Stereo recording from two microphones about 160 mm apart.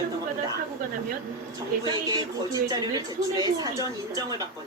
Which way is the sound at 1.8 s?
25° right (ahead or behind).